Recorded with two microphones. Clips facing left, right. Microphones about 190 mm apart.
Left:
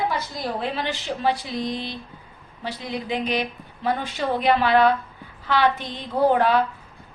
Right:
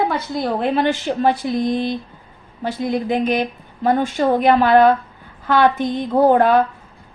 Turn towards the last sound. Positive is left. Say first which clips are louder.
# right 5 dB
turn(degrees=-50)  # may be behind; listen again after turning